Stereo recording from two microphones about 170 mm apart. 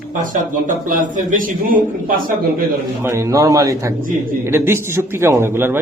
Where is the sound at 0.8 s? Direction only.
50° right (ahead or behind).